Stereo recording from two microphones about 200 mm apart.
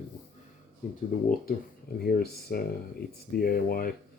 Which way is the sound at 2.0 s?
50° left (ahead or behind).